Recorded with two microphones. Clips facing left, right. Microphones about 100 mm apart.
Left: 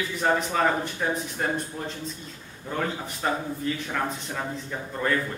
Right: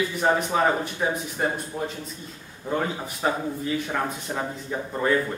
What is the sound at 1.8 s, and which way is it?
Speech, 20° right (ahead or behind).